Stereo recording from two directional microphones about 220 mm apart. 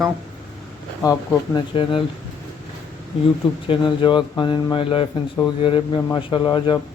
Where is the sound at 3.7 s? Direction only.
20° left (ahead or behind).